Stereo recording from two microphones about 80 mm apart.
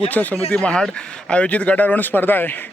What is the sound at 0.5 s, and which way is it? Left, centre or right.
Speech, centre.